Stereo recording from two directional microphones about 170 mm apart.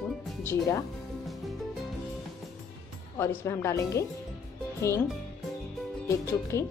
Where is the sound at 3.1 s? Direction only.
15° left (ahead or behind).